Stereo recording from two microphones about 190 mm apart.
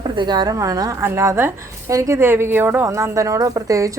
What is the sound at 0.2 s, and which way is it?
A woman's voice, 20° right (ahead or behind).